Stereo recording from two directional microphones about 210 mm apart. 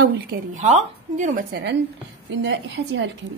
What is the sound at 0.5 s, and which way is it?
A woman's voice, 35° right (ahead or behind).